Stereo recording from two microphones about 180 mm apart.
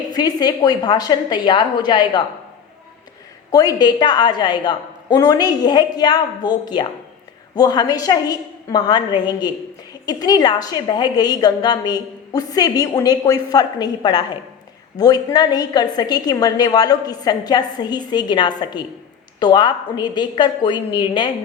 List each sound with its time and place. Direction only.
0.1 s a woman's voice: 20° left (ahead or behind)
3.5 s a woman's voice: 20° left (ahead or behind)